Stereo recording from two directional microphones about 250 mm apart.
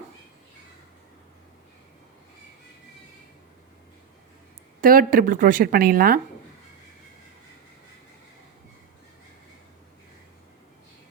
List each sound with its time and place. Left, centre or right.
4.8 s speech: right